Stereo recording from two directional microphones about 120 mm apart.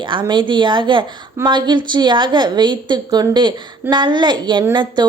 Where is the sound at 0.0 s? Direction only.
40° right (ahead or behind).